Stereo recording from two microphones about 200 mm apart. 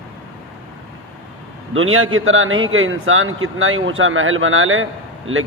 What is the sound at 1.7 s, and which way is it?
A man's voice, 90° right.